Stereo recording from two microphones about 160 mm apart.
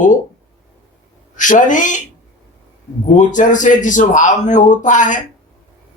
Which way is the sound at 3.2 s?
50° left (ahead or behind).